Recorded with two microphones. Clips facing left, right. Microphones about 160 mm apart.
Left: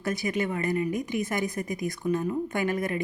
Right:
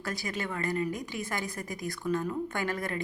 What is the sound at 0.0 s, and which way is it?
Speech, 20° left (ahead or behind).